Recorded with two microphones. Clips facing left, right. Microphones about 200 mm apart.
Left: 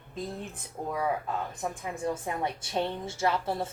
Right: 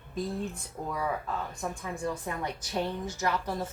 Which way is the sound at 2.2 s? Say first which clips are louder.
Left 2 dB; 25° left (ahead or behind).